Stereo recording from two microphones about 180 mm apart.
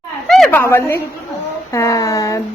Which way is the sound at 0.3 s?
Centre (ahead or behind).